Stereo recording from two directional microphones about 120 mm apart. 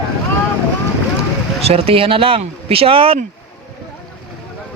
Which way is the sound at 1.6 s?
55° right (ahead or behind).